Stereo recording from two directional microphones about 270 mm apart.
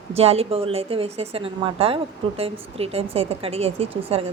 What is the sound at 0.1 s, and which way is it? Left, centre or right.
A woman's voice, right.